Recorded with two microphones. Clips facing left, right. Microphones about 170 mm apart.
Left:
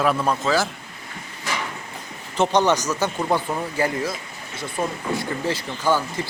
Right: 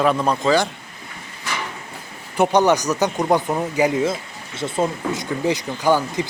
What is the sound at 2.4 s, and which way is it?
Speech, 10° right (ahead or behind).